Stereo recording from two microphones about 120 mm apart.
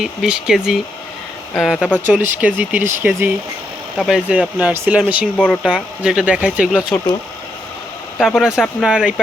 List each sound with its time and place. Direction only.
0.0 s speech: 5° right (ahead or behind)
2.0 s speech: 15° right (ahead or behind)
3.9 s speech: 5° right (ahead or behind)
8.4 s speech: 5° right (ahead or behind)